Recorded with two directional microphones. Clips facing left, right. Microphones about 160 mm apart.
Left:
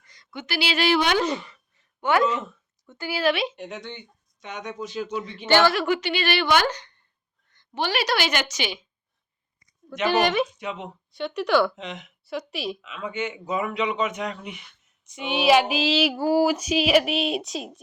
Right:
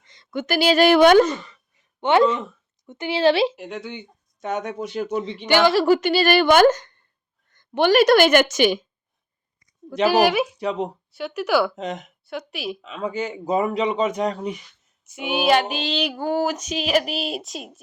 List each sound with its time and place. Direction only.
0.0 s a sound: 25° right (ahead or behind)
0.3 s speech: 45° right (ahead or behind)
2.0 s speech: 25° right (ahead or behind)
3.5 s female singing: centre (ahead or behind)
4.4 s speech: 45° right (ahead or behind)
5.5 s speech: 15° right (ahead or behind)
5.7 s a man's voice: 35° right (ahead or behind)
10.1 s speech: 5° right (ahead or behind)
10.6 s a man's voice: 35° right (ahead or behind)
11.1 s female singing: 5° right (ahead or behind)
11.8 s speech: 45° right (ahead or behind)
12.2 s female singing: centre (ahead or behind)
12.8 s a man's voice: 35° right (ahead or behind)
15.0 s female singing: 5° right (ahead or behind)